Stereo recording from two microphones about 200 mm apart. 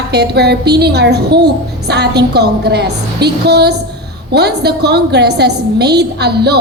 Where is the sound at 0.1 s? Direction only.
55° right (ahead or behind).